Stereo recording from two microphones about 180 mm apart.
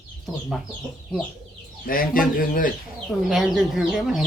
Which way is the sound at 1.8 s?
55° left (ahead or behind).